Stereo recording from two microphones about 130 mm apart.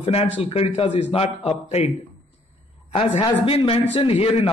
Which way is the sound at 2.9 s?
45° left (ahead or behind).